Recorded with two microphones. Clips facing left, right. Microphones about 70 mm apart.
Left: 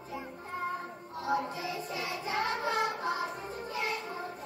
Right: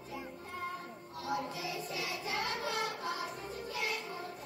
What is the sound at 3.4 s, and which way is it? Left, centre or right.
Music, left.